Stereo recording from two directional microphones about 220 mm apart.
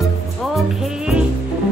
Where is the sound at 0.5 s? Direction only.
Centre (ahead or behind).